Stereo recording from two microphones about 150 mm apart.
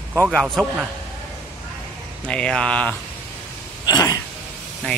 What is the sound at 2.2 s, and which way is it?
Speech, 5° left (ahead or behind).